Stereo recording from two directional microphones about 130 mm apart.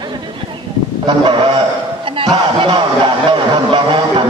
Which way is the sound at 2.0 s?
40° right (ahead or behind).